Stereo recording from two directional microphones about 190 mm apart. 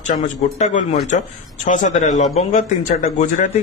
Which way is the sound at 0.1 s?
35° left (ahead or behind).